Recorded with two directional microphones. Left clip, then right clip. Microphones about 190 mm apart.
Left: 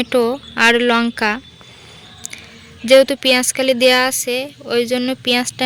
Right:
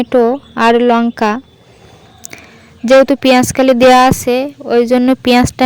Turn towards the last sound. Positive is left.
turn(degrees=-50)  # may be behind; listen again after turning